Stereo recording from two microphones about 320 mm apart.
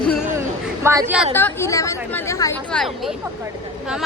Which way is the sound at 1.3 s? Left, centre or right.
Centre.